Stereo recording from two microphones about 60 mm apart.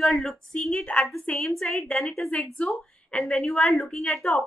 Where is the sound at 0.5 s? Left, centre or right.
Centre.